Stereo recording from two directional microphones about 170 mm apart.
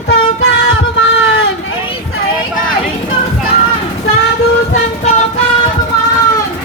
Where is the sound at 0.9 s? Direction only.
90° left.